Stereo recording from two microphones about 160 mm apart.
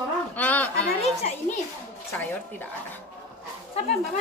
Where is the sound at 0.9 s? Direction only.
40° left (ahead or behind).